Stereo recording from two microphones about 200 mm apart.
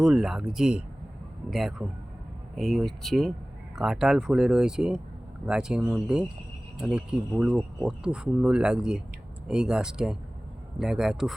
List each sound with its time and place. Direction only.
0.0 s speech: centre (ahead or behind)